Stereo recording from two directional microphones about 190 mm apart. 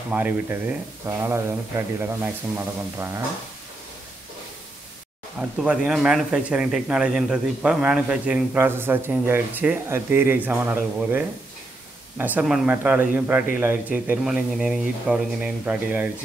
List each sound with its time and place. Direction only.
0.1 s speech: 10° right (ahead or behind)
5.4 s speech: 5° right (ahead or behind)